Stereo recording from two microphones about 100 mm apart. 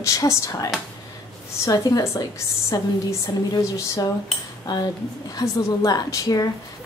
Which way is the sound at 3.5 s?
40° left (ahead or behind).